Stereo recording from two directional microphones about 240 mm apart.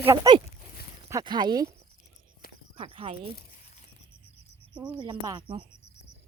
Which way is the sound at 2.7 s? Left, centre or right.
Right.